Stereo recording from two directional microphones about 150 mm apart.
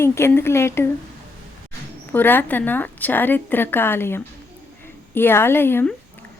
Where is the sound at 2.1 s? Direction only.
15° left (ahead or behind).